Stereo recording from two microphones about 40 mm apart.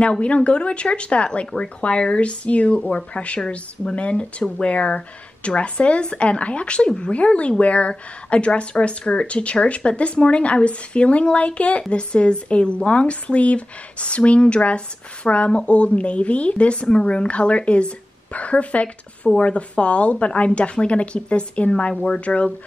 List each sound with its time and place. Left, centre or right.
0.0 s a woman's voice: left